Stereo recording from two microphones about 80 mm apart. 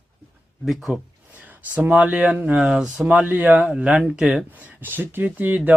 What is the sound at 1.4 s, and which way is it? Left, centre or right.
Speech, centre.